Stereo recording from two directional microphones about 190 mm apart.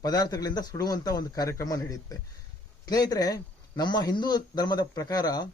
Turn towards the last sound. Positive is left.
turn(degrees=20)  # may be behind; listen again after turning